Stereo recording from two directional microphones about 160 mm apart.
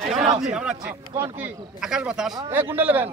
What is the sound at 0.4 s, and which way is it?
Speech, 5° right (ahead or behind).